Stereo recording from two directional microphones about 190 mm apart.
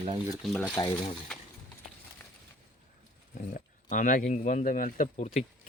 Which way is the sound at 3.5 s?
45° left (ahead or behind).